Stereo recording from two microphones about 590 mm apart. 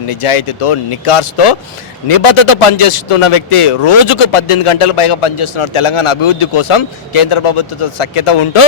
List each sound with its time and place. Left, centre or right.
0.1 s a man's voice: left